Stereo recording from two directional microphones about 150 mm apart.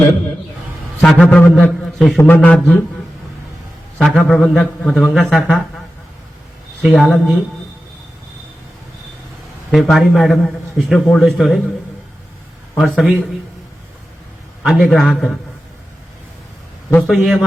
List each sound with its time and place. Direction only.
1.0 s a man's voice: 5° left (ahead or behind)
3.9 s a man's voice: 5° left (ahead or behind)
6.8 s a man's voice: centre (ahead or behind)
9.7 s a man's voice: centre (ahead or behind)
12.7 s a man's voice: centre (ahead or behind)
14.6 s a man's voice: centre (ahead or behind)
17.1 s a man's voice: centre (ahead or behind)